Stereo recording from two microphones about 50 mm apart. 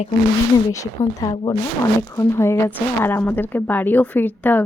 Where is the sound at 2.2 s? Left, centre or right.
Left.